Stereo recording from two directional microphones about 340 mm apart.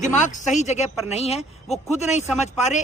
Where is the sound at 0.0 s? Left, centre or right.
Left.